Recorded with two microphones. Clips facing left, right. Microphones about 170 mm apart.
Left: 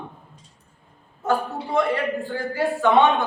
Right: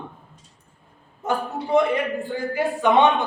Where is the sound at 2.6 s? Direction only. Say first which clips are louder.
Even; 20° right (ahead or behind).